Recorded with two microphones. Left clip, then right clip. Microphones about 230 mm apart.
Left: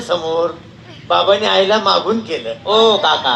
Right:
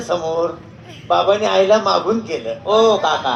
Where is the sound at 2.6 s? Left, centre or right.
Right.